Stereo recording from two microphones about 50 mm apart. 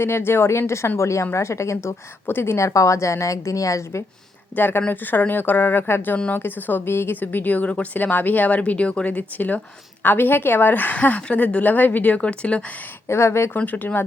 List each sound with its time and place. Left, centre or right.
0.0 s a woman's voice: left
0.9 s speech: left
2.2 s a woman's voice: left
4.5 s a woman's voice: left
7.2 s a woman's voice: left
12.2 s speech: left
13.1 s a woman's voice: left
13.6 s a woman's voice: left